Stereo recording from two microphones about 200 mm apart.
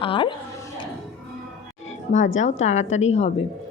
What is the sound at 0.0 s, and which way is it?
Speech, 25° left (ahead or behind).